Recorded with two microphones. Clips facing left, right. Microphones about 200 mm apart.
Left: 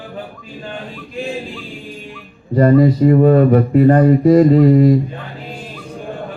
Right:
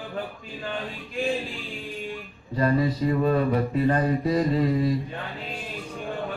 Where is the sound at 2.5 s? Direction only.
60° left (ahead or behind).